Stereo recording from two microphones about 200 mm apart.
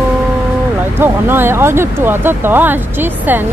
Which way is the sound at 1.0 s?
10° right (ahead or behind).